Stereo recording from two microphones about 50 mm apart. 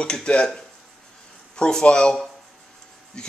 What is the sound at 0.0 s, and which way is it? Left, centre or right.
Speech, centre.